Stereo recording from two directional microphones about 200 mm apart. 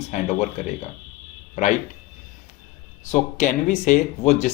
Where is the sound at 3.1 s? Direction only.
40° left (ahead or behind).